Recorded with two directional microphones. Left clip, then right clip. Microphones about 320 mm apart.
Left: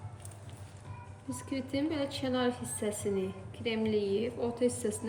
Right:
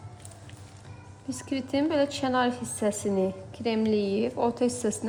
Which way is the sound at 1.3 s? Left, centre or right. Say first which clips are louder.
Right 7 dB; centre.